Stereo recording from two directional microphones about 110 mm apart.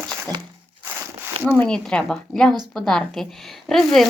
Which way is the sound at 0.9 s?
20° right (ahead or behind).